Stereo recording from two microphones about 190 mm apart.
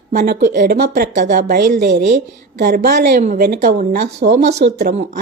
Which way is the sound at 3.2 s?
45° right (ahead or behind).